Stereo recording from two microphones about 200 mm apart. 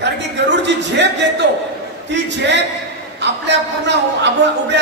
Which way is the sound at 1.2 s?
60° right (ahead or behind).